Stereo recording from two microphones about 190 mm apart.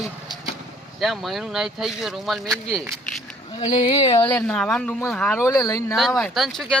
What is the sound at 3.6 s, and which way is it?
Speech, 30° left (ahead or behind).